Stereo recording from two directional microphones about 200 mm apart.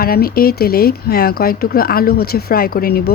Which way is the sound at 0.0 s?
50° left (ahead or behind).